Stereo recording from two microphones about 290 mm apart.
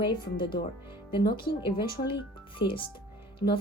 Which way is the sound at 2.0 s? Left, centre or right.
Left.